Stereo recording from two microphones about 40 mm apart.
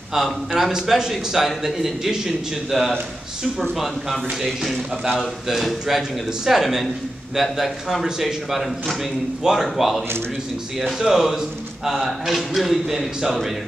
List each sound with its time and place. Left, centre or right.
0.1 s a man's voice: centre